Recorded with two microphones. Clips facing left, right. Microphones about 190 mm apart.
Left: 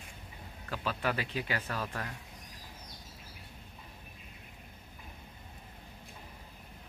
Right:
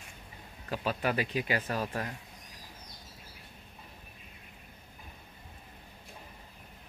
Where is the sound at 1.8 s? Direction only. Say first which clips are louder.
Right 4 dB; 35° right (ahead or behind).